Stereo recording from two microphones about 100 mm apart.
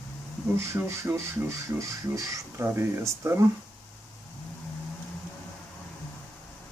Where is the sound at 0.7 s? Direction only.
20° right (ahead or behind).